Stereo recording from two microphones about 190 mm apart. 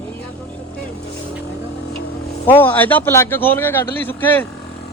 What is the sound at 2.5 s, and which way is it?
A man's voice, 10° left (ahead or behind).